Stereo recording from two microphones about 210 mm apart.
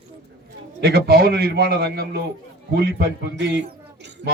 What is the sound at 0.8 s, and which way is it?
A man's voice, 50° right (ahead or behind).